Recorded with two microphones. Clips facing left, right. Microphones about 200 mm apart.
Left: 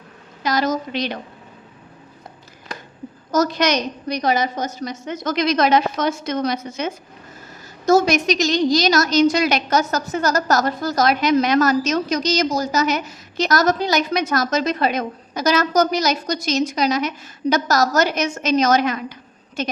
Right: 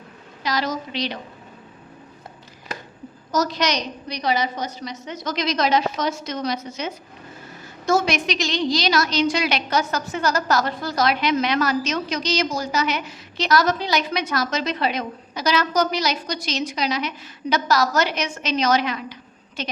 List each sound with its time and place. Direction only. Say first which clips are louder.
0.4 s a woman's voice: left 5 dB; 45° left (ahead or behind)
3.3 s a woman's voice: left 4 dB; 50° left (ahead or behind)
7.9 s a woman's voice: left 5 dB; 40° left (ahead or behind)